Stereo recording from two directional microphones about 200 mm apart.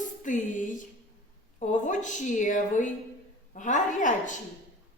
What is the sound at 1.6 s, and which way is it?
A woman's voice, 40° left (ahead or behind).